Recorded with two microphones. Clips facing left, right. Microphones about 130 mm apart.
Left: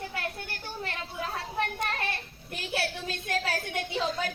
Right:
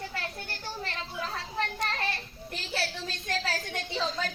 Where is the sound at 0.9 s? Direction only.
55° left (ahead or behind).